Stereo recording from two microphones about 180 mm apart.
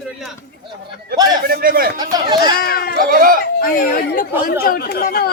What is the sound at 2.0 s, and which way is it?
Speech, 25° right (ahead or behind).